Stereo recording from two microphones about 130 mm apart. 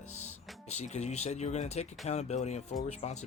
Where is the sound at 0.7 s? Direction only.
60° left (ahead or behind).